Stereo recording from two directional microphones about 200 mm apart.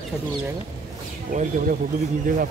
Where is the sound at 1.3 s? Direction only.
40° right (ahead or behind).